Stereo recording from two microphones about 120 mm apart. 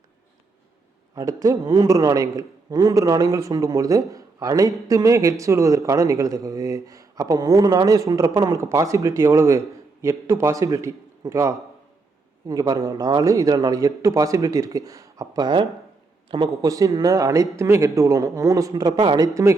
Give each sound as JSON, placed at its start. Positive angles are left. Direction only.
{"t": 1.1, "sound": "a man's voice", "side_deg": -30}